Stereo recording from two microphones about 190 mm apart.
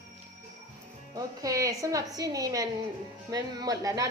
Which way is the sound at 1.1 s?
20° right (ahead or behind).